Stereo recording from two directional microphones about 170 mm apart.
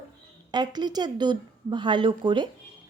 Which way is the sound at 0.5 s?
25° right (ahead or behind).